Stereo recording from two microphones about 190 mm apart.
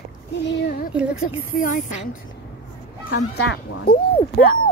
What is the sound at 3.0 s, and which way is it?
Speech, 65° left (ahead or behind).